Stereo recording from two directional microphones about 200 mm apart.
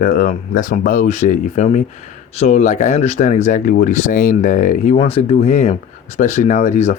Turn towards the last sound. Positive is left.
turn(degrees=40)  # may be behind; listen again after turning